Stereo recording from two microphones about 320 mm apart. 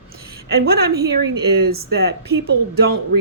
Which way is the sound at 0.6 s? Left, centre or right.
Right.